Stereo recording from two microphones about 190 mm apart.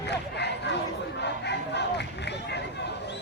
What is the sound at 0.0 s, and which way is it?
Crowd, 65° left (ahead or behind).